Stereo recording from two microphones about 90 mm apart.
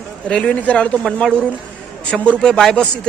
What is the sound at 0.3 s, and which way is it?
Speech, 10° left (ahead or behind).